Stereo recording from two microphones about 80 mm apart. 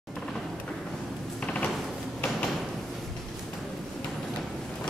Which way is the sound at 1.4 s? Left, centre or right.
Centre.